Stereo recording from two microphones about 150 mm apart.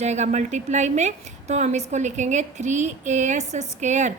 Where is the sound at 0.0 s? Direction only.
50° right (ahead or behind).